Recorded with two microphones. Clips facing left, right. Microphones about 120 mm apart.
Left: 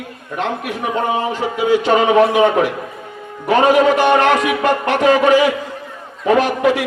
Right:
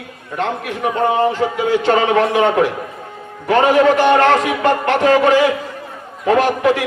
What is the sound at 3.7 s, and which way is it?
A man's voice, 15° left (ahead or behind).